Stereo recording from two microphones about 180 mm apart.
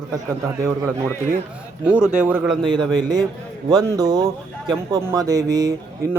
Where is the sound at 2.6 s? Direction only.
25° right (ahead or behind).